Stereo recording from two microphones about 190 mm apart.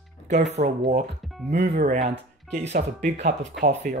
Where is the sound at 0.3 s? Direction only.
40° right (ahead or behind).